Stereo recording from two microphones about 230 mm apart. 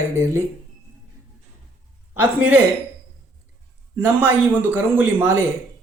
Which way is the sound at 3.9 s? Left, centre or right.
Centre.